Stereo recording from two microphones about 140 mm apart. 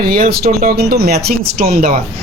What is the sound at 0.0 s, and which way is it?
Speech, 90° right.